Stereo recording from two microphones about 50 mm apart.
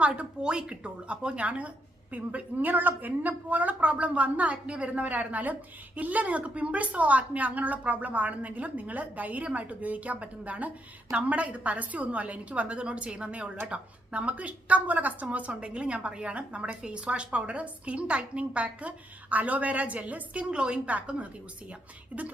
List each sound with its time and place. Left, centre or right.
0.0 s a woman's voice: right